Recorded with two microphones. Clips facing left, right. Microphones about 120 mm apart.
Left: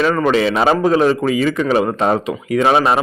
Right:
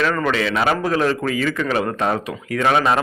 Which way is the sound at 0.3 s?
25° left (ahead or behind).